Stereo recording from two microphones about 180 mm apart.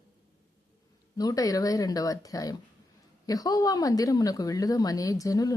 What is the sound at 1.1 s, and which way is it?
A woman's voice, 20° left (ahead or behind).